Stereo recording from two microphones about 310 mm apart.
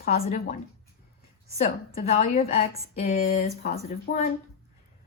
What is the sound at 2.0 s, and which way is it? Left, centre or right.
Speech, left.